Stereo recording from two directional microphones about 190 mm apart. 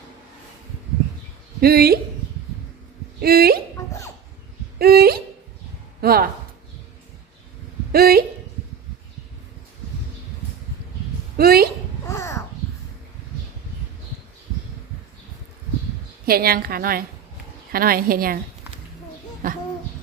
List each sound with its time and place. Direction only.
1.6 s a woman's voice: 55° right (ahead or behind)
3.2 s speech: 50° right (ahead or behind)
4.8 s a woman's voice: 55° right (ahead or behind)
7.9 s a woman's voice: 55° right (ahead or behind)
11.3 s a woman's voice: 55° right (ahead or behind)
12.0 s a sound: 15° left (ahead or behind)
16.2 s a woman's voice: 55° right (ahead or behind)